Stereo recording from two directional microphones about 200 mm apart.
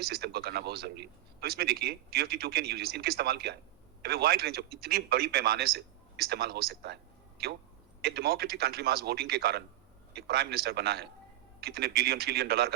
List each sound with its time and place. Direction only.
0.0 s a man's voice: 50° right (ahead or behind)